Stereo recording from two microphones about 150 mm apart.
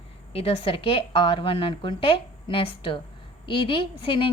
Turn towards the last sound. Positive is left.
turn(degrees=35)  # may be behind; listen again after turning